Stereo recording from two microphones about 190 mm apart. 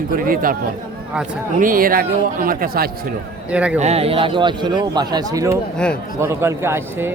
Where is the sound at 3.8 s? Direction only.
35° right (ahead or behind); by 5.6 s 15° right (ahead or behind).